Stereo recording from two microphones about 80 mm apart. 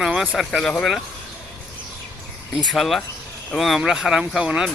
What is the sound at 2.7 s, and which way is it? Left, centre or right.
Speech, centre.